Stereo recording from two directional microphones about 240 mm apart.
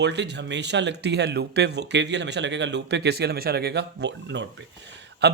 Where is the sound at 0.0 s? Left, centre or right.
Right.